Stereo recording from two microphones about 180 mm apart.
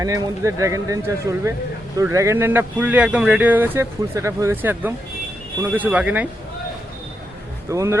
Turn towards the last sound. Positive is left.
turn(degrees=-15)  # may be behind; listen again after turning